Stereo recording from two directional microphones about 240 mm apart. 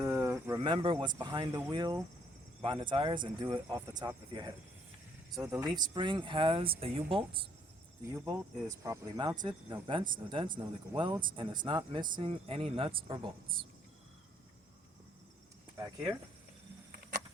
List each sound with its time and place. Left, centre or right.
0.0 s speech: centre